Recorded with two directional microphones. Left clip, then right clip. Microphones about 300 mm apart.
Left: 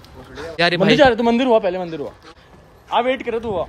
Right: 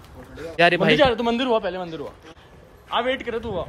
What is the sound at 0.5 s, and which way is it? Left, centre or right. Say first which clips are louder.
Speech: left 1 dB; centre.